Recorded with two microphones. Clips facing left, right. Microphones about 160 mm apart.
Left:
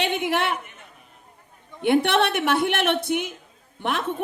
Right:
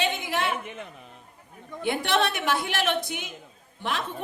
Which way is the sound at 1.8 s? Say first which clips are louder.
Left 6 dB; 65° left (ahead or behind).